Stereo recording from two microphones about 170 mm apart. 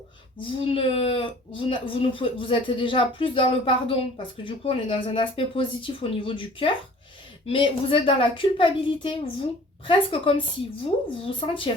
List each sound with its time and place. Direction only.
0.5 s speech: 30° left (ahead or behind)